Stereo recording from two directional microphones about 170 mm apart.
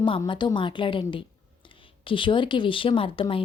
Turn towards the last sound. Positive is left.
turn(degrees=30)  # may be behind; listen again after turning